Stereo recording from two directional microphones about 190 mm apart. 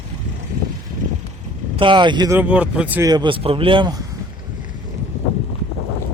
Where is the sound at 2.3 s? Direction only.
10° right (ahead or behind).